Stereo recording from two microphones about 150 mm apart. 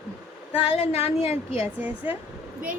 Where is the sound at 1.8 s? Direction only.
10° right (ahead or behind).